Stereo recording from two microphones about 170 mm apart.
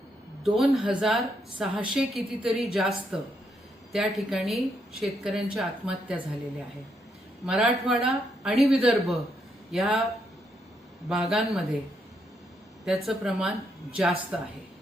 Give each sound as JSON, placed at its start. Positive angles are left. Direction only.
{"t": 0.4, "sound": "a woman's voice", "side_deg": 0}
{"t": 7.4, "sound": "a woman's voice", "side_deg": -5}
{"t": 11.1, "sound": "a woman's voice", "side_deg": 0}
{"t": 12.8, "sound": "a woman's voice", "side_deg": 0}